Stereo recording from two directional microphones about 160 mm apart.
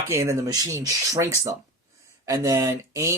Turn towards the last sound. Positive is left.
turn(degrees=-20)  # may be behind; listen again after turning